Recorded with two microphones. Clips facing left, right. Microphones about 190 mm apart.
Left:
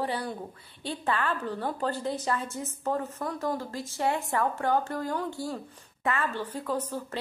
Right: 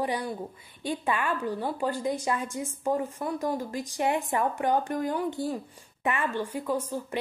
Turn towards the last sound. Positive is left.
turn(degrees=-10)  # may be behind; listen again after turning